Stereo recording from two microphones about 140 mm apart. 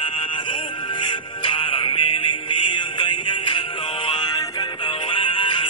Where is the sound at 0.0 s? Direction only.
35° left (ahead or behind).